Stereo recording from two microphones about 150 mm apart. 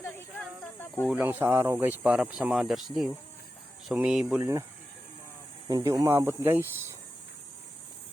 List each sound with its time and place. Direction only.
0.0 s snake: 15° left (ahead or behind)
1.0 s speech: 10° right (ahead or behind)
5.6 s speech: 25° right (ahead or behind)